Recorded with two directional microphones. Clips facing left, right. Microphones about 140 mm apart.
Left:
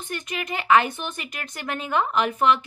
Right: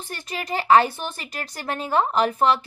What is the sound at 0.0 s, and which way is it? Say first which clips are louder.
A woman's voice: left 1 dB; 35° right (ahead or behind).